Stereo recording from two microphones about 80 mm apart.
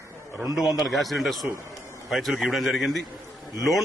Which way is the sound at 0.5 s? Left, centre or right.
Centre.